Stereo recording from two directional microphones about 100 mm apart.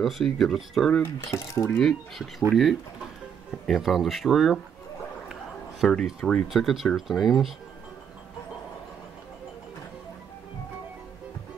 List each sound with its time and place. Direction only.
0.0 s speech: 5° left (ahead or behind)
1.3 s speech: 30° left (ahead or behind)
1.8 s speech: 5° left (ahead or behind)
5.3 s a sound: 5° left (ahead or behind)
6.2 s speech: 5° left (ahead or behind)